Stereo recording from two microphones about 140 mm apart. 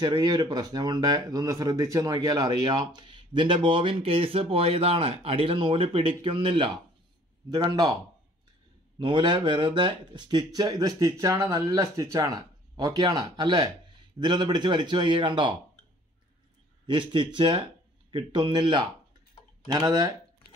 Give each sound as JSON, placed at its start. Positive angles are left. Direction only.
{"t": 0.0, "sound": "speech", "side_deg": -30}
{"t": 16.8, "sound": "speech", "side_deg": -35}